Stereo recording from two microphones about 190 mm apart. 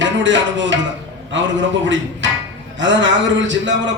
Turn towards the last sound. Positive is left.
turn(degrees=-75)  # may be behind; listen again after turning